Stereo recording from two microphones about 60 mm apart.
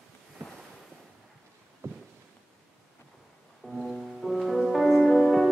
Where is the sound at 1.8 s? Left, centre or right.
Right.